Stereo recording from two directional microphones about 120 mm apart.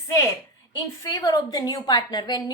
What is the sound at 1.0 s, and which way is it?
A woman's voice, 30° left (ahead or behind).